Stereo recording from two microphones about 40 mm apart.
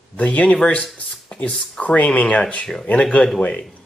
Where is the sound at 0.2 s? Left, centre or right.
Left.